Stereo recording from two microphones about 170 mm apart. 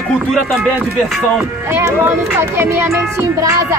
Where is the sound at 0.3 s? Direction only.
Centre (ahead or behind).